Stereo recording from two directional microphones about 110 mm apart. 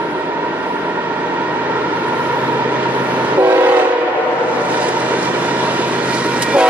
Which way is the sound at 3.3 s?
15° right (ahead or behind).